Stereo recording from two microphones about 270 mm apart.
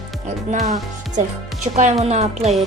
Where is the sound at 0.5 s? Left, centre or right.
Right.